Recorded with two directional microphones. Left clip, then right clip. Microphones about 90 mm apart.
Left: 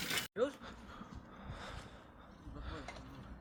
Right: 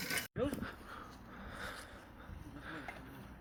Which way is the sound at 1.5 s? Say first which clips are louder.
Right 4 dB; 25° left (ahead or behind).